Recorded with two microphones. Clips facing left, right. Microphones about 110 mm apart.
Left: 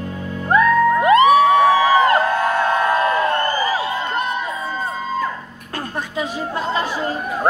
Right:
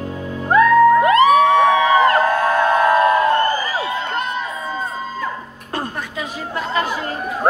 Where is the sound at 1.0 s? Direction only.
25° left (ahead or behind).